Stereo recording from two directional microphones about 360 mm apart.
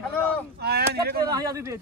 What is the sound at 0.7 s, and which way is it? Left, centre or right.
Speech, right.